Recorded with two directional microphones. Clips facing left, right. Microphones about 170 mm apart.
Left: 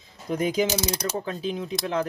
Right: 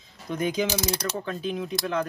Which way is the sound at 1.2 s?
30° left (ahead or behind).